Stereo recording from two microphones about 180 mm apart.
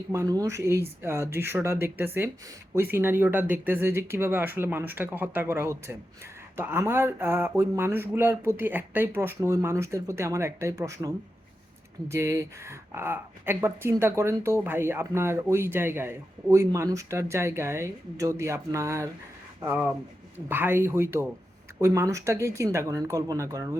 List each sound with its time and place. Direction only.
0.1 s speech: 20° right (ahead or behind)